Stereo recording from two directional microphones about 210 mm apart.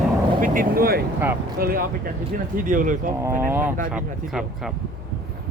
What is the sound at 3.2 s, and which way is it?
Speech, 10° right (ahead or behind).